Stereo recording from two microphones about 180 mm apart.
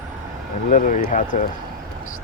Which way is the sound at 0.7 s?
45° left (ahead or behind).